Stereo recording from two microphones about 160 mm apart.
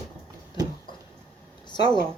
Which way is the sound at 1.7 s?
30° left (ahead or behind).